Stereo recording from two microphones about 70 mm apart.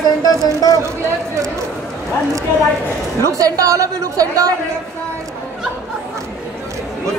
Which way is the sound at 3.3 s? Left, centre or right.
Right.